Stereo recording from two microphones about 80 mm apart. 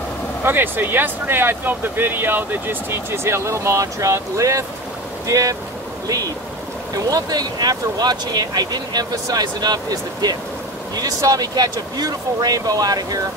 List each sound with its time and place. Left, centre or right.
0.4 s speech: right